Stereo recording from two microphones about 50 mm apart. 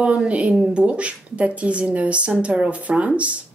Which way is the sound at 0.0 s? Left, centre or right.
Right.